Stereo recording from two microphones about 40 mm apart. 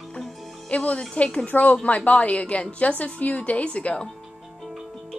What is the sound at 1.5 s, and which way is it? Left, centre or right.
A woman's voice, left.